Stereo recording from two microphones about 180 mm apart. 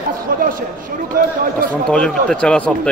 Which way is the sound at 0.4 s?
50° right (ahead or behind).